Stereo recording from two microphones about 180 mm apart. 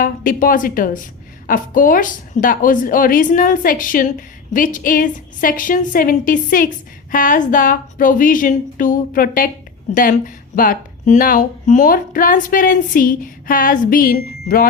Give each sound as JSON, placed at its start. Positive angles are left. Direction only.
{"t": 0.0, "sound": "speech", "side_deg": 50}